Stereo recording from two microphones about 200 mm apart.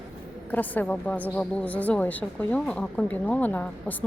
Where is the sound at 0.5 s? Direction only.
10° left (ahead or behind).